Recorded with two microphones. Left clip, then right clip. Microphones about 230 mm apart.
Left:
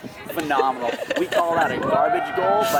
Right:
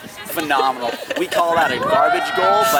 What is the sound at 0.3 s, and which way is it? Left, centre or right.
Speech, centre.